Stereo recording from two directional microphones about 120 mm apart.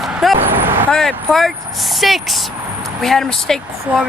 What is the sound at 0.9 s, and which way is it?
Speech, 5° left (ahead or behind).